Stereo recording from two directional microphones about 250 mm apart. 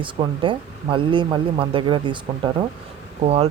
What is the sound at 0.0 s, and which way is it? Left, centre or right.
Speech, centre.